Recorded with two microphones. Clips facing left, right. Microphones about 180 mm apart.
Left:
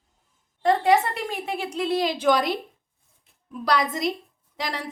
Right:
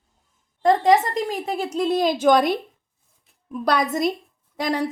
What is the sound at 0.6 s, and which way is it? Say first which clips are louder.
A woman's voice: right 3 dB; 40° right (ahead or behind).